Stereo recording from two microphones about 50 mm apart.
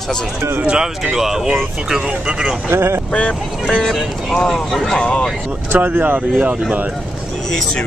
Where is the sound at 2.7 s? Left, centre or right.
Right.